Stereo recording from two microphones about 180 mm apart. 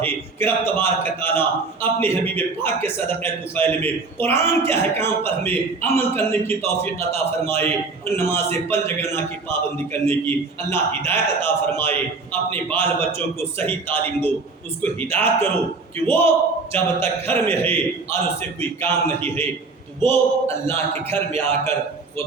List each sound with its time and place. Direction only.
0.0 s a man's voice: 10° left (ahead or behind)